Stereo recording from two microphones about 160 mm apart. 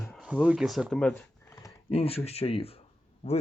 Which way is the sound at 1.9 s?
35° left (ahead or behind).